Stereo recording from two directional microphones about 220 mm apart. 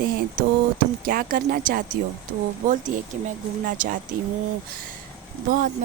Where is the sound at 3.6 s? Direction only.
40° right (ahead or behind).